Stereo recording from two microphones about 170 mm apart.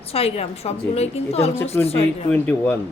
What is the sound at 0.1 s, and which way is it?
A woman's voice, 35° left (ahead or behind).